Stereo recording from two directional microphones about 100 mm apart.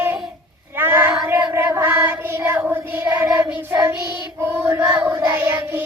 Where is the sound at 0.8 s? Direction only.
20° right (ahead or behind).